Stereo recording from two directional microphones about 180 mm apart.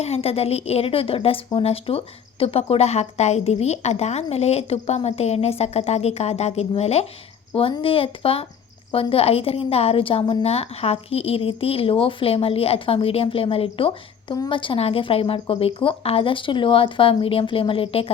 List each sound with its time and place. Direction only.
0.0 s a woman's voice: 35° left (ahead or behind)